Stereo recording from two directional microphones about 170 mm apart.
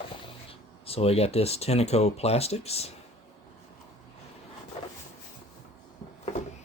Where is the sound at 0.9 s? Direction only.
35° left (ahead or behind).